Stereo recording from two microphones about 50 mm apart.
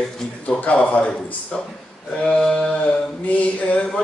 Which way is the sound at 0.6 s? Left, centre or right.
Left.